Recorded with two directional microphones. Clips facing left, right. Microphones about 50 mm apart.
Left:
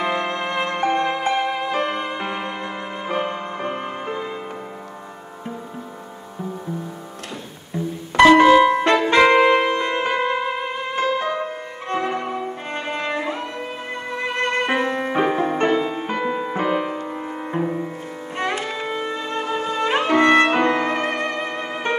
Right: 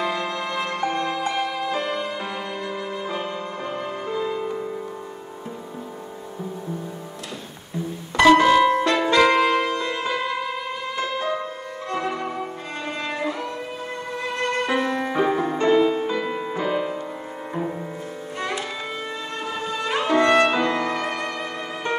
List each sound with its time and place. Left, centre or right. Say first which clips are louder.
0.0 s music: left 3 dB; left
8.5 s music: left 3 dB; left
11.2 s music: left 2 dB; left
11.9 s violin: left 3 dB; left
14.1 s music: left 3 dB; left
15.5 s music: even; left
15.8 s music: right 5 dB; left
16.1 s music: left 2 dB; left
17.6 s music: left 4 dB; centre